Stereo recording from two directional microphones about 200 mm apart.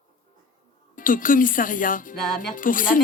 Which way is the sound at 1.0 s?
45° left (ahead or behind).